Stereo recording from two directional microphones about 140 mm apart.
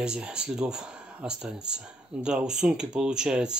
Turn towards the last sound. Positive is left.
turn(degrees=-5)  # may be behind; listen again after turning